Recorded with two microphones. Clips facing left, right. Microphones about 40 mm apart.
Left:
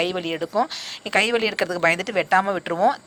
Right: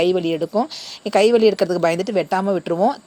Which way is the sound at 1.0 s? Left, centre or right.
Left.